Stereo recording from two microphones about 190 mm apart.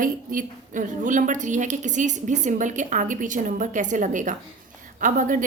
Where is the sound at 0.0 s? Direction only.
45° right (ahead or behind).